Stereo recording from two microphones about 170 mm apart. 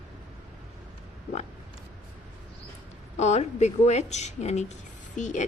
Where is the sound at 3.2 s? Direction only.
40° left (ahead or behind).